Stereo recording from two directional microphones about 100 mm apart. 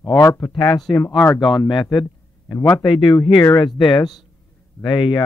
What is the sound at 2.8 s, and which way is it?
Speech, 55° left (ahead or behind).